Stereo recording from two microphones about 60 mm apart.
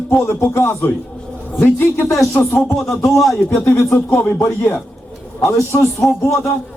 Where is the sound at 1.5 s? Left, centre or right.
Left.